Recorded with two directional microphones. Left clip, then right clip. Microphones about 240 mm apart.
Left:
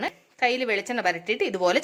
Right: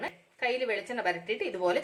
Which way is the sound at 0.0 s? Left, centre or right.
Left.